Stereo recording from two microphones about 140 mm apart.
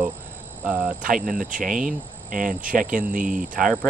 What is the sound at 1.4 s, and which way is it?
Speech, 70° right (ahead or behind).